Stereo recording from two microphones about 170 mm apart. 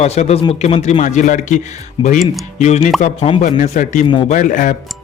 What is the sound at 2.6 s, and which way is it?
Speech, 40° left (ahead or behind).